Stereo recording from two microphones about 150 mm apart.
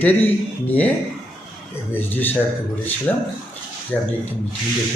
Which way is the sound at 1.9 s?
10° left (ahead or behind).